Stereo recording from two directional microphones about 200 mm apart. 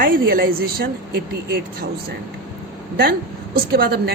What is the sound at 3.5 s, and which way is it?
Speech, 50° right (ahead or behind).